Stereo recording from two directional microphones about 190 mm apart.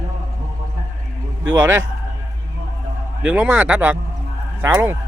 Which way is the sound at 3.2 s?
5° right (ahead or behind).